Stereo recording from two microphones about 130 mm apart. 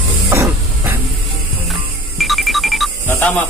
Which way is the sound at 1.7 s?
Centre (ahead or behind).